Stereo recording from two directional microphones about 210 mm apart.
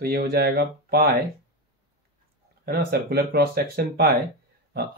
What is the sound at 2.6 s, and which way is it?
Speech, 50° right (ahead or behind).